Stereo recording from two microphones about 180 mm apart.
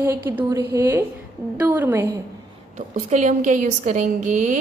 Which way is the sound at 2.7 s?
40° right (ahead or behind).